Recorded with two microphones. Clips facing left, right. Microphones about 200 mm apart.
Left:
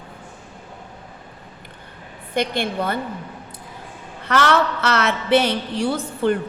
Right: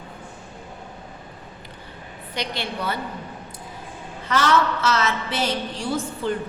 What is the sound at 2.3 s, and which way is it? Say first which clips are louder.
Speech: left 7 dB; 50° left (ahead or behind).